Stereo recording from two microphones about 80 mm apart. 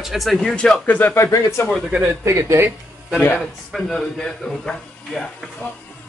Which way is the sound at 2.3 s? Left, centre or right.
Right.